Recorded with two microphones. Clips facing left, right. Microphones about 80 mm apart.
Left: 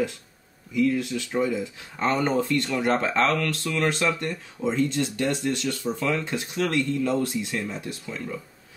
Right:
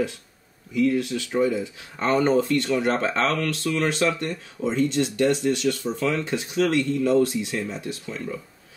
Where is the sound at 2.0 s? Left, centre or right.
Centre.